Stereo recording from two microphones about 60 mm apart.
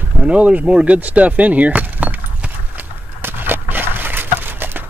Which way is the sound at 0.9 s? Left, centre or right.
Right.